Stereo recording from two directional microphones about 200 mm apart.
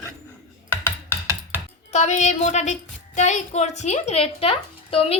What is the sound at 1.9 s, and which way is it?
A woman's voice, 35° left (ahead or behind).